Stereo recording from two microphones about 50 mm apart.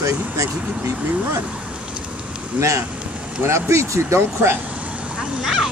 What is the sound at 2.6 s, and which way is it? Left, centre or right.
Speech, right.